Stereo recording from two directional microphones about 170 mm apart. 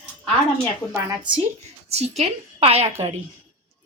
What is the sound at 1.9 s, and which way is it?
A woman's voice, 40° right (ahead or behind).